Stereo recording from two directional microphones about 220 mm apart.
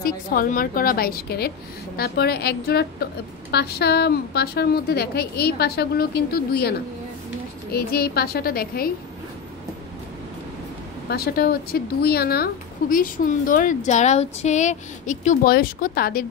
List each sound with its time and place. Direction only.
0.0 s a woman's voice: 40° left (ahead or behind)
7.7 s a woman's voice: 45° left (ahead or behind)
11.1 s a woman's voice: 45° left (ahead or behind)